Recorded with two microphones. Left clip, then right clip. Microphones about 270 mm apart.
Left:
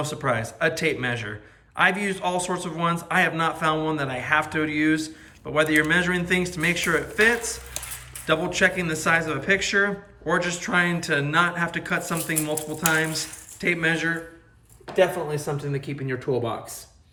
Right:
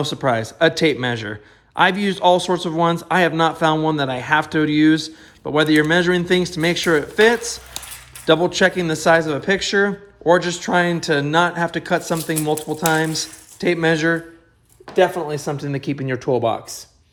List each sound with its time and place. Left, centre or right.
0.0 s a man's voice: centre
14.9 s a man's voice: right